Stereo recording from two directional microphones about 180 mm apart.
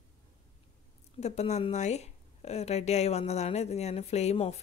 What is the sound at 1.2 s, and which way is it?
A woman's voice, 35° left (ahead or behind).